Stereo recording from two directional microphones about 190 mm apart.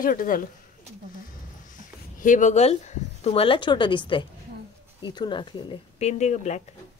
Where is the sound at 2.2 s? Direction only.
40° left (ahead or behind); by 5.7 s 25° left (ahead or behind).